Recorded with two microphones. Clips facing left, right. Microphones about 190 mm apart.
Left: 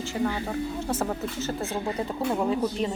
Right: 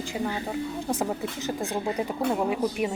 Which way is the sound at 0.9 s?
15° right (ahead or behind).